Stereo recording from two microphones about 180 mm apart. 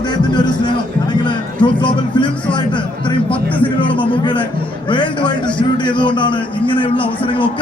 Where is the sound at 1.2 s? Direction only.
25° left (ahead or behind).